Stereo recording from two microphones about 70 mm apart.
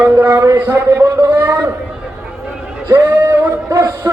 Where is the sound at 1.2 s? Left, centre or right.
Right.